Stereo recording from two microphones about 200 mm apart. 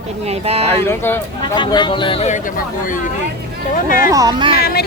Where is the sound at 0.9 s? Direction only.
10° left (ahead or behind).